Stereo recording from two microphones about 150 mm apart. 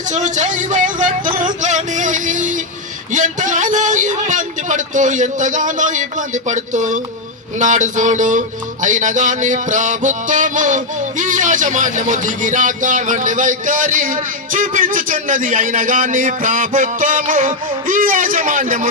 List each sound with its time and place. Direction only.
0.1 s music: 55° right (ahead or behind)